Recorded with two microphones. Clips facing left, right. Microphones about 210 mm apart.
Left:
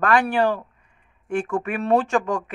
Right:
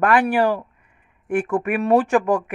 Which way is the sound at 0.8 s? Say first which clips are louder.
Right 3 dB; 55° right (ahead or behind).